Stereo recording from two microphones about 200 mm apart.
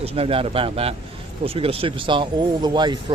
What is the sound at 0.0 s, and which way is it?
Speech, 30° right (ahead or behind).